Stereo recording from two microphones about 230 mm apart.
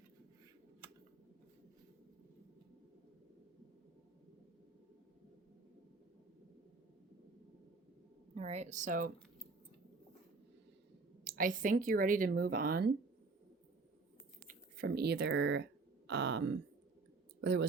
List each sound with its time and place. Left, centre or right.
8.4 s speech: right
11.2 s speech: right
14.4 s speech: right